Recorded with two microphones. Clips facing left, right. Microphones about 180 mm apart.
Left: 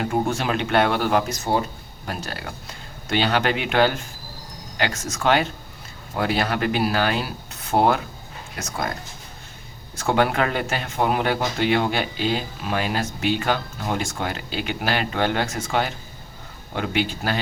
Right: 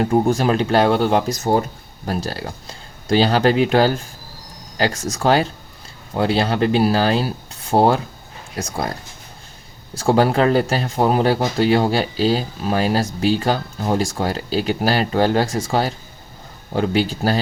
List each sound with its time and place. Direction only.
0.0 s speech: 35° right (ahead or behind)
9.9 s speech: 35° right (ahead or behind)